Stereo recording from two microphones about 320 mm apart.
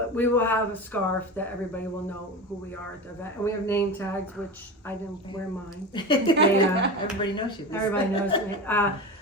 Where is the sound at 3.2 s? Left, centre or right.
Centre.